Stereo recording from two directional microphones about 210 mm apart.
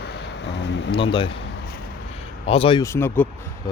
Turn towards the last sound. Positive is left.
turn(degrees=10)  # may be behind; listen again after turning